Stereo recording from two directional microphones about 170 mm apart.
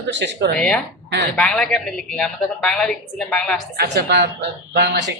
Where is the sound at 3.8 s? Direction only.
75° right (ahead or behind).